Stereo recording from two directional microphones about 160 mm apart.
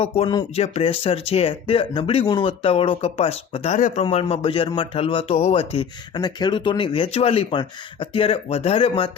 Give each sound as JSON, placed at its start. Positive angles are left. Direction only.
{"t": 0.0, "sound": "speech", "side_deg": 30}
{"t": 3.8, "sound": "speech", "side_deg": 50}
{"t": 4.0, "sound": "speech", "side_deg": 35}